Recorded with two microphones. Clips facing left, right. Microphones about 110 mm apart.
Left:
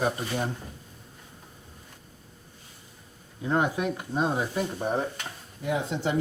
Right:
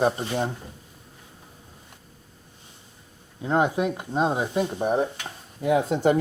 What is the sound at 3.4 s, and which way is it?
Speech, 20° right (ahead or behind).